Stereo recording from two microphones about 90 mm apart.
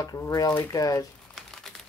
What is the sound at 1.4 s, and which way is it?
Pigeon, 5° left (ahead or behind).